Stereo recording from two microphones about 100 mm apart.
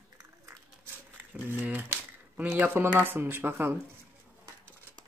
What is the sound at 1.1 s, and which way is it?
Speech, 15° right (ahead or behind).